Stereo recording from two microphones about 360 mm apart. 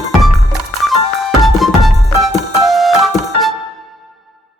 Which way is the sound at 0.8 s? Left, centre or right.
Centre.